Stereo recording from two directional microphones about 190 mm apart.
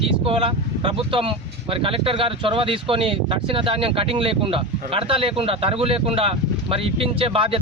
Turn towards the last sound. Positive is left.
turn(degrees=-30)  # may be behind; listen again after turning